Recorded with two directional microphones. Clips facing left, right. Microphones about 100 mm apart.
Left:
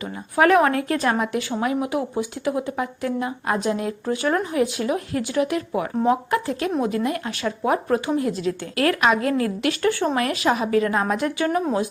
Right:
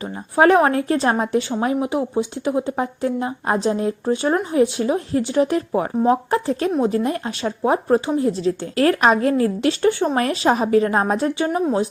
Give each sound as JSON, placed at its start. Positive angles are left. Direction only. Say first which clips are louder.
{"t": 0.0, "sound": "a woman's voice", "louder": "right 3 dB", "side_deg": -30}